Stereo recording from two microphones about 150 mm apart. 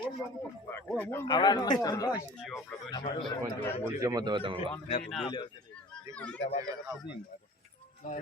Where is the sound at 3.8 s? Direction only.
25° right (ahead or behind).